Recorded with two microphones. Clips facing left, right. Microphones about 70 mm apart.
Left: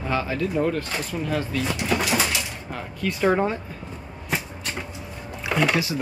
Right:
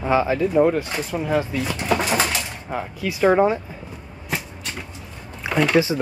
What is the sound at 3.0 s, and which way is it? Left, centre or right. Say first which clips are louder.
Speech: right 4 dB; centre.